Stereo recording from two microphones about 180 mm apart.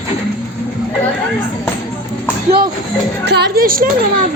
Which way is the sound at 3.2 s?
65° right (ahead or behind).